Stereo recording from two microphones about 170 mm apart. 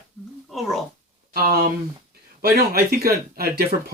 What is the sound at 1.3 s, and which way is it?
Speech, 60° right (ahead or behind).